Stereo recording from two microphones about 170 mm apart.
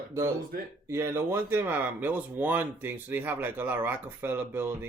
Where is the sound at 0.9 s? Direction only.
15° right (ahead or behind).